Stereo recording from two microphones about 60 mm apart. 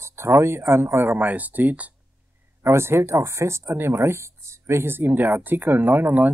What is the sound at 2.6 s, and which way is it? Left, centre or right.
Speech, right.